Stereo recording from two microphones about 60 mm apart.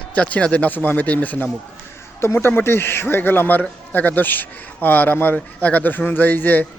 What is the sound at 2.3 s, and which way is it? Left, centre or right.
A man's voice, left.